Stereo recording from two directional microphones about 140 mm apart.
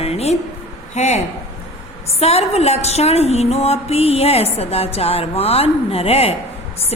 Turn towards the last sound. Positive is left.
turn(degrees=45)  # may be behind; listen again after turning